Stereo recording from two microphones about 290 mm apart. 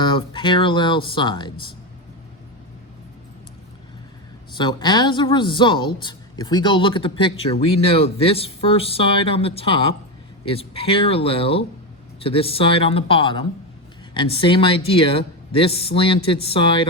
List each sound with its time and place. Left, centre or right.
0.0 s a woman's voice: centre
4.5 s a woman's voice: centre